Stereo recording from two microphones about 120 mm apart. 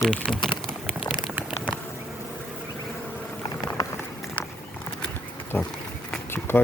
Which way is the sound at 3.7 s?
20° left (ahead or behind).